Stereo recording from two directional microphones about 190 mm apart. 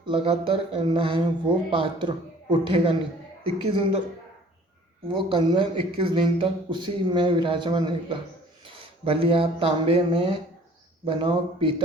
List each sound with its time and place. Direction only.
0.0 s a man's voice: 25° right (ahead or behind)
5.0 s a man's voice: 25° right (ahead or behind)